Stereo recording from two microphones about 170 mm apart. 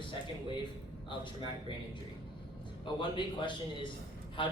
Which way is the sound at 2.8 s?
30° left (ahead or behind).